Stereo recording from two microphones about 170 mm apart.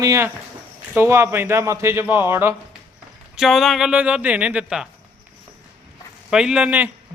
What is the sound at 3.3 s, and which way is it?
A man's voice, centre (ahead or behind).